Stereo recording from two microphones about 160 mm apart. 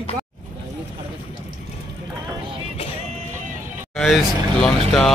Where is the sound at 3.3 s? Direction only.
50° right (ahead or behind).